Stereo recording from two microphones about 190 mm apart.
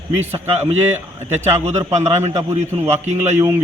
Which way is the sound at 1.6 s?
35° right (ahead or behind).